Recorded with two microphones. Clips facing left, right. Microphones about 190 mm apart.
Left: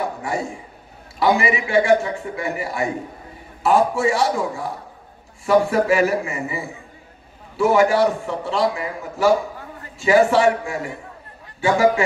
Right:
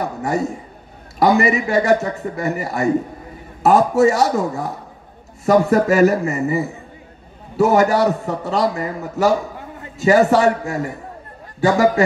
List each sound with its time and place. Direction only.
0.2 s a man's voice: 40° right (ahead or behind)